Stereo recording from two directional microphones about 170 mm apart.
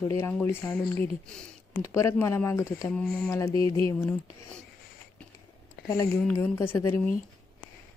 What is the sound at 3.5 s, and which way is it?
Speech, 30° right (ahead or behind).